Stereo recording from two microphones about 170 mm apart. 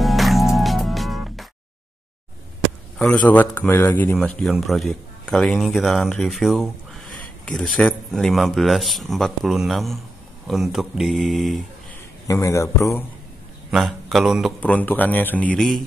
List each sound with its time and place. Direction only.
0.0 s music: centre (ahead or behind)
3.0 s speech: 5° left (ahead or behind)
12.3 s speech: 20° left (ahead or behind)
13.7 s speech: centre (ahead or behind)
14.6 s speech: 10° left (ahead or behind)